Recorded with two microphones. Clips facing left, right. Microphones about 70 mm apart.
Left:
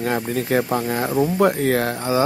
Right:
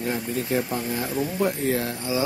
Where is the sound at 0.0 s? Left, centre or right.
Left.